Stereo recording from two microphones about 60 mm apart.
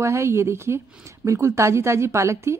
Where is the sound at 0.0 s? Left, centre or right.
Right.